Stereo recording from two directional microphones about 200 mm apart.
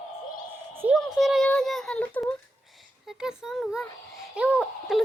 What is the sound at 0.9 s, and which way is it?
Child singing, centre (ahead or behind).